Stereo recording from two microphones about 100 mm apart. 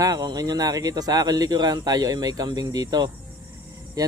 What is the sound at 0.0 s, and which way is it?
Speech, 40° right (ahead or behind).